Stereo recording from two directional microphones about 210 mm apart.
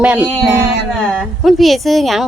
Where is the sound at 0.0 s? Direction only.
5° right (ahead or behind).